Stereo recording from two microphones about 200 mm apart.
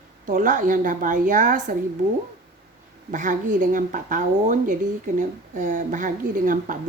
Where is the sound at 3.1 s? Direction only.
40° right (ahead or behind).